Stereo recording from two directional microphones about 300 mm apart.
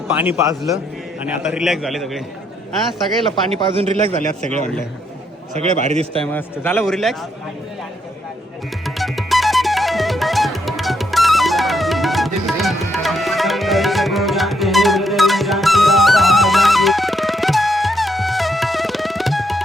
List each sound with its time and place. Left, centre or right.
0.1 s a man's voice: centre
3.8 s a man's voice: centre
6.3 s a man's voice: centre
8.8 s music: centre